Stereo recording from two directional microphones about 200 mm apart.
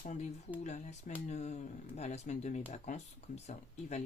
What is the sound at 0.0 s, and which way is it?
Speech, 35° left (ahead or behind).